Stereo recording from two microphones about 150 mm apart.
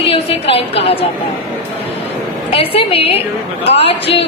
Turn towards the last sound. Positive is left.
turn(degrees=40)  # may be behind; listen again after turning